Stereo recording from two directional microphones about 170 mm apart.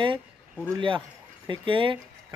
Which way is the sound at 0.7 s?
30° right (ahead or behind).